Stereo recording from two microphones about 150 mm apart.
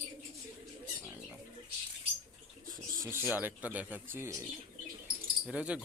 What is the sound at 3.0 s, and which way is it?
Speech, 15° right (ahead or behind).